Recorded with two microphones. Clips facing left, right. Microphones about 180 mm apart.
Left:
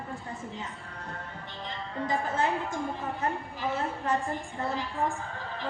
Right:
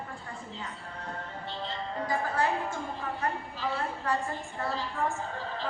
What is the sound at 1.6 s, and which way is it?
A woman's voice, 20° left (ahead or behind).